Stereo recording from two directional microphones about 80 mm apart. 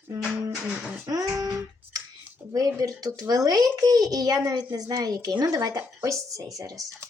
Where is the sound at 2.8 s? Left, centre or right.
Right.